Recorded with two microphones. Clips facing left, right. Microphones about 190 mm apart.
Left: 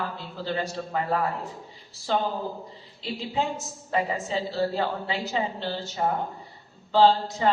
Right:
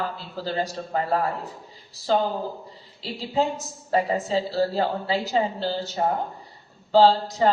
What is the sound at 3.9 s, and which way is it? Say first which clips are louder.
A woman's voice: right 4 dB; 35° right (ahead or behind).